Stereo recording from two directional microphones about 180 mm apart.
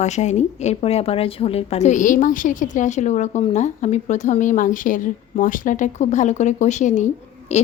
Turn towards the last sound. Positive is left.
turn(degrees=40)  # may be behind; listen again after turning